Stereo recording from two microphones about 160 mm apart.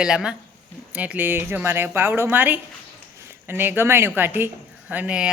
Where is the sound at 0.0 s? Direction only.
5° right (ahead or behind).